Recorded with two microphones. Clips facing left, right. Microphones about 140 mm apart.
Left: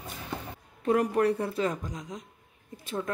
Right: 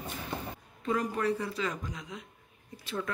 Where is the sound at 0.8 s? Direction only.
60° left (ahead or behind).